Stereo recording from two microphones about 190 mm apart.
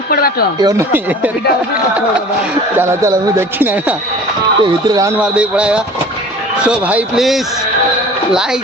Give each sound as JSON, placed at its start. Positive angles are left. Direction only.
{"t": 0.1, "sound": "speech", "side_deg": 55}
{"t": 0.6, "sound": "speech", "side_deg": -15}
{"t": 2.7, "sound": "speech", "side_deg": -15}
{"t": 4.6, "sound": "speech", "side_deg": -20}